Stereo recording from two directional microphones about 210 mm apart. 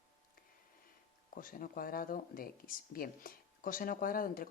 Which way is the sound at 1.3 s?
40° left (ahead or behind).